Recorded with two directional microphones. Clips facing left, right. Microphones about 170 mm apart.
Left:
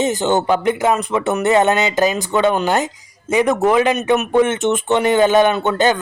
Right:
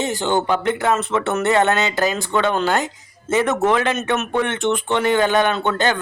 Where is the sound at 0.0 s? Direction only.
20° left (ahead or behind).